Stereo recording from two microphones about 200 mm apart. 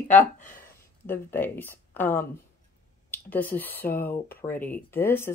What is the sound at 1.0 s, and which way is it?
Speech, 10° left (ahead or behind).